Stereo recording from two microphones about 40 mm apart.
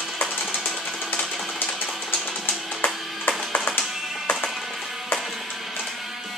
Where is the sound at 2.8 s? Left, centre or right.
Left.